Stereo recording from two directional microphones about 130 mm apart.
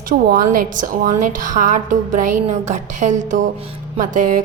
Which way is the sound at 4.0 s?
90° right.